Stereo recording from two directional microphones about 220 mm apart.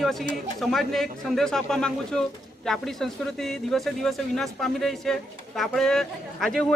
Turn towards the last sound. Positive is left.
turn(degrees=0)  # may be behind; listen again after turning